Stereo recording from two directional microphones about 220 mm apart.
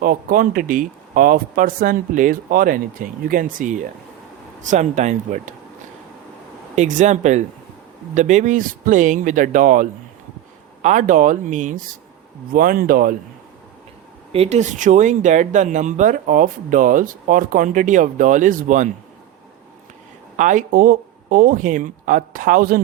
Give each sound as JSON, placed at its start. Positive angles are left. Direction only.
{"t": 0.0, "sound": "speech", "side_deg": -40}
{"t": 6.7, "sound": "speech", "side_deg": -35}
{"t": 14.3, "sound": "speech", "side_deg": -30}
{"t": 20.3, "sound": "speech", "side_deg": -35}